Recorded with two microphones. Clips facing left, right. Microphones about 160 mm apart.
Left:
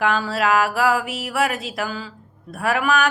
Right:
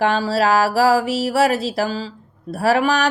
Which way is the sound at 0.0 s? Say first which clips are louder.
Right 3 dB; 35° right (ahead or behind).